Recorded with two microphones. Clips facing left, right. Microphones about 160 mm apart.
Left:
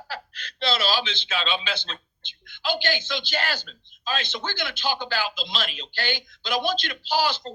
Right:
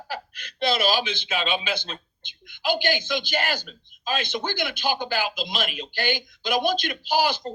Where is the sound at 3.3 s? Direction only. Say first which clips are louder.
Right 2 dB; 15° right (ahead or behind).